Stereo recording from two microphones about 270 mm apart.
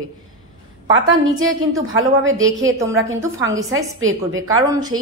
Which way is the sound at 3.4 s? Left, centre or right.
Right.